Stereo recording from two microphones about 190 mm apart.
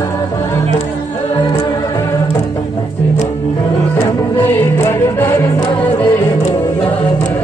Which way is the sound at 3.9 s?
10° left (ahead or behind).